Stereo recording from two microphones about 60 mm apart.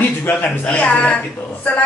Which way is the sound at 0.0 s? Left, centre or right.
Left.